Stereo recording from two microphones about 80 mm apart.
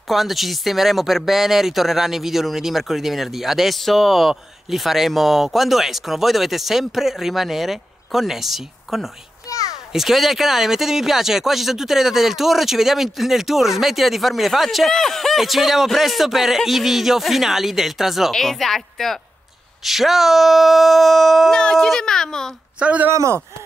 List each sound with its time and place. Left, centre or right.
0.1 s speech: centre
9.5 s a sound: left
9.9 s a child's voice: centre
22.8 s speech: centre
23.1 s speech: right